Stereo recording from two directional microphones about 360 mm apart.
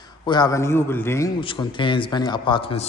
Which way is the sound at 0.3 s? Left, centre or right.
Centre.